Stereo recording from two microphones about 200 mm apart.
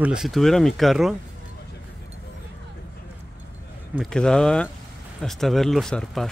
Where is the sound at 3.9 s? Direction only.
5° left (ahead or behind).